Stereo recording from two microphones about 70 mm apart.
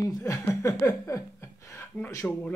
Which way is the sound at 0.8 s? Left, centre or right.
Left.